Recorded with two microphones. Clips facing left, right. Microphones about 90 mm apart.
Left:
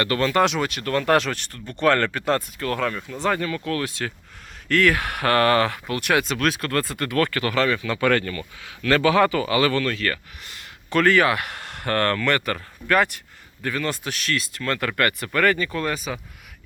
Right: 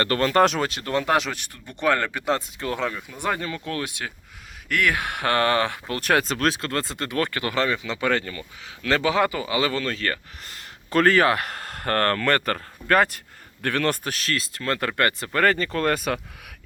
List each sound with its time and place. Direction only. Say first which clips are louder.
0.0 s speech: right 1 dB; 40° right (ahead or behind)
0.9 s speech: left 3 dB; 15° right (ahead or behind)
5.9 s speech: even; 40° right (ahead or behind)
13.6 s speech: right 3 dB; 65° right (ahead or behind)
14.0 s speech: left 1 dB; 40° right (ahead or behind); by 16.2 s 55° right (ahead or behind)